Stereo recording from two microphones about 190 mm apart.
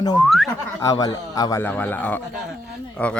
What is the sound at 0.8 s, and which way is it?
A man's voice, 20° left (ahead or behind).